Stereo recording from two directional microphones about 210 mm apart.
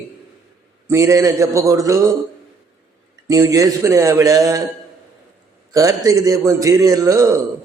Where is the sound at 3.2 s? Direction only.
15° right (ahead or behind).